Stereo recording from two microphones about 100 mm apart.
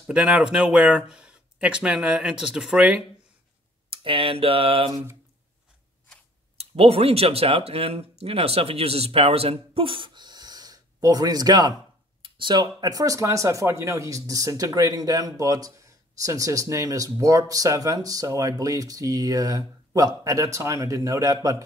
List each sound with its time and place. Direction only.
0.0 s speech: 10° right (ahead or behind)
3.9 s speech: 65° right (ahead or behind)
6.6 s speech: 85° right; by 11.7 s 40° right (ahead or behind)
12.2 s speech: 50° right (ahead or behind); by 21.6 s 35° right (ahead or behind)